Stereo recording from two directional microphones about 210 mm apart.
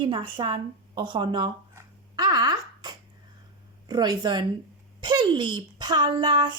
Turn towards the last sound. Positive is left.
turn(degrees=-20)  # may be behind; listen again after turning